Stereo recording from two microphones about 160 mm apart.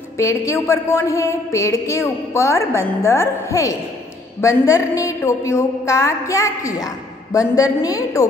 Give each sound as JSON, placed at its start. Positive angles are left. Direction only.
{"t": 0.2, "sound": "a woman's voice", "side_deg": 20}